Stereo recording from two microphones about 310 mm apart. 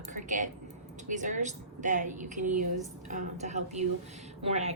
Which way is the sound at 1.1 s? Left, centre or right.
Right.